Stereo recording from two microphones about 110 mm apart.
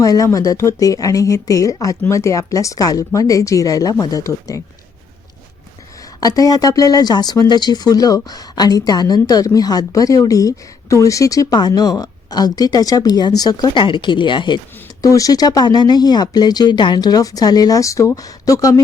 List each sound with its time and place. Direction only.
0.0 s speech: 30° left (ahead or behind)
6.1 s speech: 35° left (ahead or behind)
13.8 s speech: 45° left (ahead or behind)
15.0 s speech: 30° left (ahead or behind)